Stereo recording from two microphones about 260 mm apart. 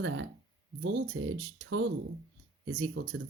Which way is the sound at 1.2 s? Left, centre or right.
Right.